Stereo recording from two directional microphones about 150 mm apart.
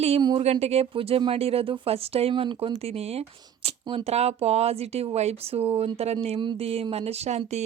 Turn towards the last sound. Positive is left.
turn(degrees=-45)  # may be behind; listen again after turning